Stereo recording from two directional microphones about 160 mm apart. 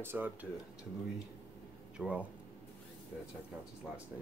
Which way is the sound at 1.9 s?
5° right (ahead or behind).